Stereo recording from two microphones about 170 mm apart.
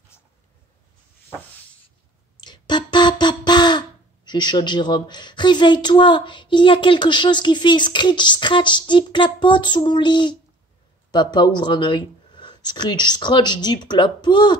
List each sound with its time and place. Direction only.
0.1 s writing: 15° left (ahead or behind)
2.4 s a sound: 25° left (ahead or behind)
11.1 s speech: 25° left (ahead or behind)